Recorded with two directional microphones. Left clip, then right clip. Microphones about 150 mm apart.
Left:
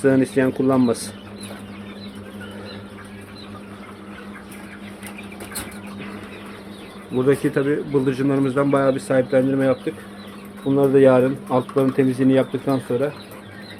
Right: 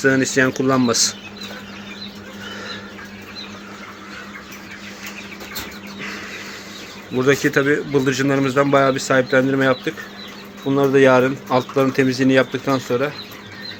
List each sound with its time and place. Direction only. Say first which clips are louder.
0.0 s speech: right 2 dB; 20° left (ahead or behind)
0.4 s speech: right 1 dB; 5° left (ahead or behind)
7.3 s speech: right 4 dB; 10° left (ahead or behind)
10.9 s speech: right 1 dB; 15° left (ahead or behind)